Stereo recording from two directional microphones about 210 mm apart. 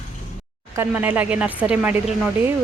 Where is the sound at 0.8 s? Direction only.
10° right (ahead or behind).